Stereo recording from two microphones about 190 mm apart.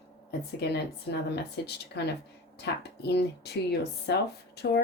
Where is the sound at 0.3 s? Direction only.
60° left (ahead or behind).